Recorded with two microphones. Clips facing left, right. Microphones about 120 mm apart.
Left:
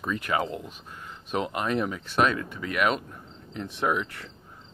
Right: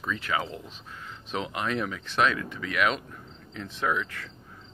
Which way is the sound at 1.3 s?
45° left (ahead or behind).